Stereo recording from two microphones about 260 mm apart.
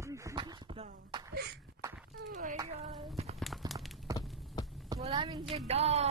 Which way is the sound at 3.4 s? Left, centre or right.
Centre.